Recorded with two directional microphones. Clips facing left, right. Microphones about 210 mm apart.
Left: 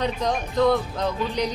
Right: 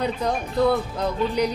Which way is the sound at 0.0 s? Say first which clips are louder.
Even; 10° right (ahead or behind).